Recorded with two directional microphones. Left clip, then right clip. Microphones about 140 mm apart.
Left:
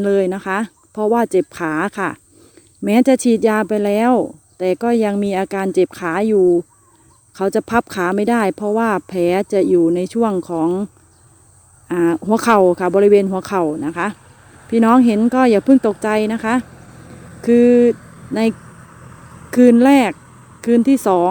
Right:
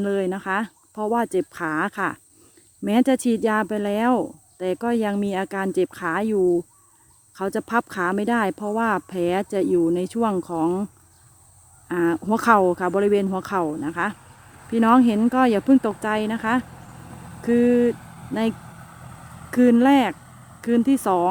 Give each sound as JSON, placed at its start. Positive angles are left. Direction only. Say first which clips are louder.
{"t": 0.0, "sound": "speech", "louder": "left 8 dB", "side_deg": 25}
{"t": 11.9, "sound": "speech", "louder": "left 6 dB", "side_deg": 25}
{"t": 16.6, "sound": "a sound", "louder": "left 2 dB", "side_deg": -20}
{"t": 17.4, "sound": "speech", "louder": "left 8 dB", "side_deg": 25}
{"t": 17.9, "sound": "vehicle", "louder": "left 5 dB", "side_deg": -35}
{"t": 18.5, "sound": "a sound", "louder": "left 2 dB", "side_deg": -45}
{"t": 19.5, "sound": "speech", "louder": "left 6 dB", "side_deg": 25}